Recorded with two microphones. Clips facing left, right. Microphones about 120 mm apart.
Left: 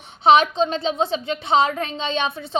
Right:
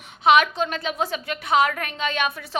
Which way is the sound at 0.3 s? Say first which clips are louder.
Left 3 dB; 25° left (ahead or behind).